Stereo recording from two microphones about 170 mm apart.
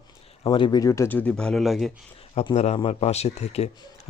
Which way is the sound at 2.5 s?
40° left (ahead or behind).